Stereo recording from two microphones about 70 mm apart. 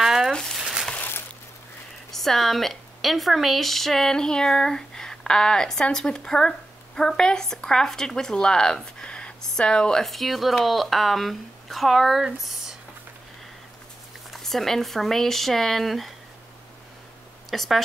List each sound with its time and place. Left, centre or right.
0.0 s crumpling: centre
0.3 s crumpling: centre
0.6 s crumpling: centre
2.0 s a woman's voice: centre
14.3 s speech: centre
17.5 s speech: centre